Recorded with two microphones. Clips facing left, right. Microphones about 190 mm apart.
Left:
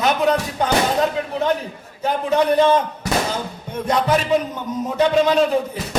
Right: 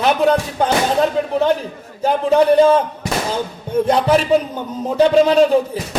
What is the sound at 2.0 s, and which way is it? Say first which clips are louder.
Speech: right 5 dB; 30° right (ahead or behind).